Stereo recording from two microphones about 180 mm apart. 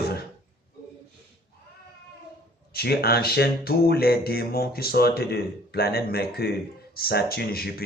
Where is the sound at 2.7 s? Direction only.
60° left (ahead or behind).